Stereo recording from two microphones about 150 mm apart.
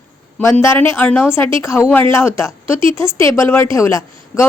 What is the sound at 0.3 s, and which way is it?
A woman's voice, 15° left (ahead or behind).